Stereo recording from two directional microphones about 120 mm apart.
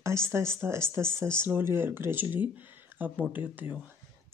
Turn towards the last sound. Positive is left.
turn(degrees=-15)  # may be behind; listen again after turning